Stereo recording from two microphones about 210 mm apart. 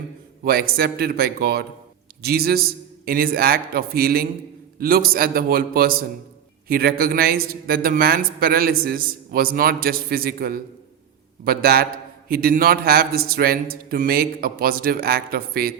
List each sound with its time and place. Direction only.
0.4 s speech: 45° right (ahead or behind)